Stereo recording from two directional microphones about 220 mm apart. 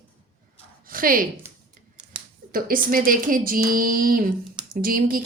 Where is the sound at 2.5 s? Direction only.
40° right (ahead or behind).